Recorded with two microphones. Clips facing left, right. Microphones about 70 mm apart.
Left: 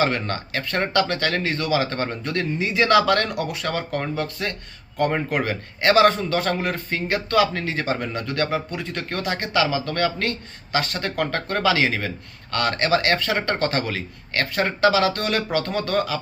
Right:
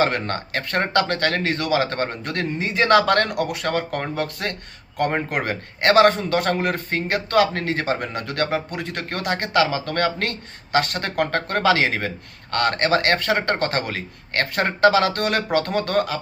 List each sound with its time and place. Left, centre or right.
0.0 s a man's voice: right